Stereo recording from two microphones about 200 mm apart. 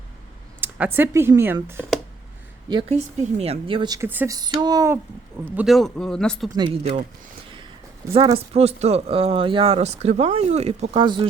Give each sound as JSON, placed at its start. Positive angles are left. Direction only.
{"t": 0.6, "sound": "speech", "side_deg": -10}
{"t": 2.9, "sound": "speech", "side_deg": -35}
{"t": 5.5, "sound": "speech", "side_deg": 0}
{"t": 6.6, "sound": "speech", "side_deg": -25}
{"t": 8.1, "sound": "speech", "side_deg": -30}